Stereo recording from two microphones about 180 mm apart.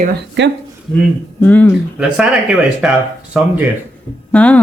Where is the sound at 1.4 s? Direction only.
10° left (ahead or behind).